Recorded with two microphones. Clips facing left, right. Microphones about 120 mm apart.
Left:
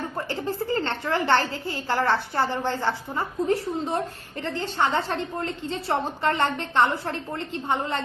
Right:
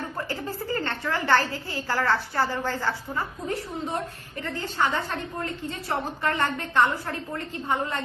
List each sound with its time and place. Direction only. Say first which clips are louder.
0.3 s a woman's voice: left 3 dB; 25° left (ahead or behind)